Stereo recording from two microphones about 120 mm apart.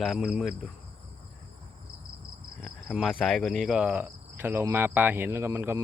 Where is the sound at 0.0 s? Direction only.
Centre (ahead or behind).